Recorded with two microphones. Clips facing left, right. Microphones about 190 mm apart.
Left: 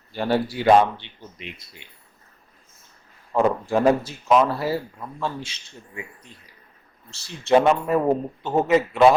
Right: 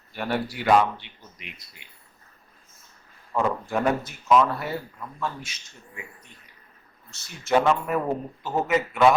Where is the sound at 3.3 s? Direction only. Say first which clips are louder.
Left 5 dB; 30° left (ahead or behind).